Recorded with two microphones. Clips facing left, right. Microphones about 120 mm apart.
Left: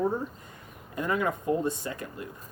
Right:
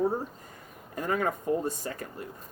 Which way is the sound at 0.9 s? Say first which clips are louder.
Left 1 dB; 40° right (ahead or behind).